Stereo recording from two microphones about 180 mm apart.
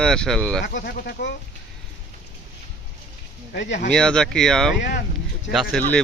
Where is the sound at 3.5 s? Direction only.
70° left (ahead or behind).